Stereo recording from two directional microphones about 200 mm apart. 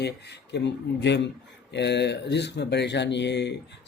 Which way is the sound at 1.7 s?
60° left (ahead or behind).